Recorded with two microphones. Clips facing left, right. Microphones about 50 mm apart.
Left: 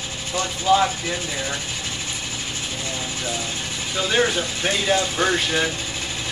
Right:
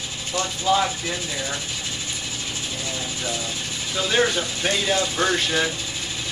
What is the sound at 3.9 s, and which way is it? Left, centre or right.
Speech, centre.